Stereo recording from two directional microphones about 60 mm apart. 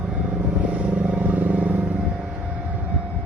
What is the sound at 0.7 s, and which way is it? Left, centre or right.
Vehicle, right.